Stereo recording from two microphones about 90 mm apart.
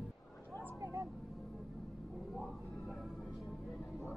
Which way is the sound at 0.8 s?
35° right (ahead or behind).